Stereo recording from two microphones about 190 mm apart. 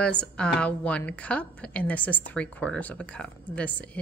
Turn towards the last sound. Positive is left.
turn(degrees=5)  # may be behind; listen again after turning